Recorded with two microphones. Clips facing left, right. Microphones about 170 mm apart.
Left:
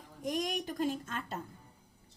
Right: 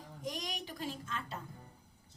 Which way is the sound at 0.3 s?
50° left (ahead or behind).